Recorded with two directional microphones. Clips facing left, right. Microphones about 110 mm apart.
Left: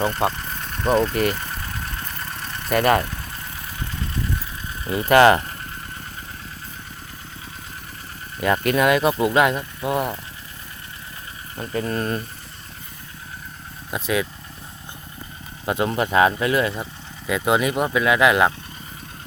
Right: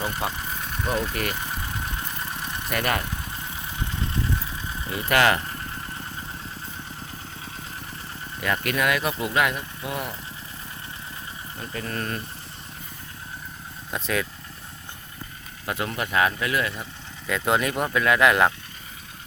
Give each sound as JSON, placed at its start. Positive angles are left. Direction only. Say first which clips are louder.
{"t": 0.3, "sound": "engine", "louder": "left 3 dB", "side_deg": -10}
{"t": 0.9, "sound": "speech", "louder": "left 9 dB", "side_deg": -10}
{"t": 1.3, "sound": "vehicle", "louder": "left 2 dB", "side_deg": -15}
{"t": 2.7, "sound": "speech", "louder": "left 8 dB", "side_deg": 35}
{"t": 3.0, "sound": "vehicle", "louder": "left 2 dB", "side_deg": -15}
{"t": 4.9, "sound": "speech", "louder": "left 7 dB", "side_deg": 30}
{"t": 8.4, "sound": "speech", "louder": "left 6 dB", "side_deg": 30}
{"t": 11.7, "sound": "speech", "louder": "left 7 dB", "side_deg": 30}
{"t": 13.9, "sound": "speech", "louder": "left 4 dB", "side_deg": 5}
{"t": 15.6, "sound": "speech", "louder": "left 7 dB", "side_deg": 25}
{"t": 17.2, "sound": "speech", "louder": "left 3 dB", "side_deg": 10}